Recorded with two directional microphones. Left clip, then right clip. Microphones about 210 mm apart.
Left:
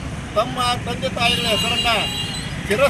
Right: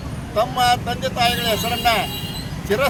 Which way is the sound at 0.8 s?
20° right (ahead or behind).